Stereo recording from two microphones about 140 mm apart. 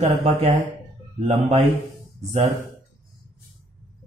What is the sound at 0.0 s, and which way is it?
Speech, 45° right (ahead or behind).